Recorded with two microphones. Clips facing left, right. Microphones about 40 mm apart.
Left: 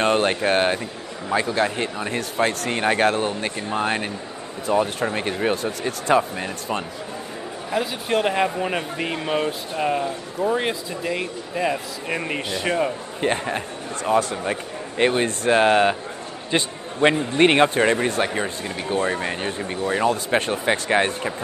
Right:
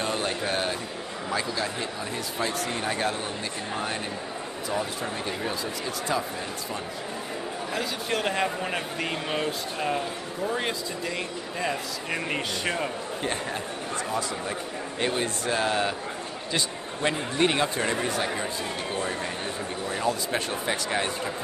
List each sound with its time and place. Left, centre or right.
0.0 s a man's voice: left
7.7 s speech: centre
13.2 s a man's voice: left
17.0 s a man's voice: left